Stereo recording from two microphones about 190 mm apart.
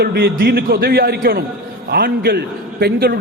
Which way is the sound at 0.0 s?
55° right (ahead or behind).